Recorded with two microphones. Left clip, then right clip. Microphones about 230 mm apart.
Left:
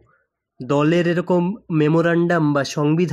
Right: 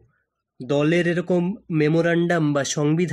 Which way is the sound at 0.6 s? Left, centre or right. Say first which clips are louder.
Left 2 dB; centre.